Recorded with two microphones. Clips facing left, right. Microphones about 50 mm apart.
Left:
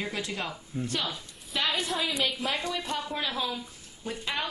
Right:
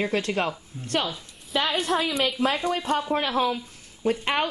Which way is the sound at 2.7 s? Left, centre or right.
Right.